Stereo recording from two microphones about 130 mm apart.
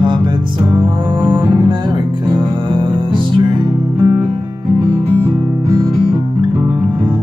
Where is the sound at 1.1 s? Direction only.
35° right (ahead or behind).